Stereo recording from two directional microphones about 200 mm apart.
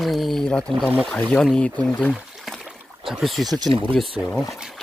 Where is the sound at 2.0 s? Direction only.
Centre (ahead or behind).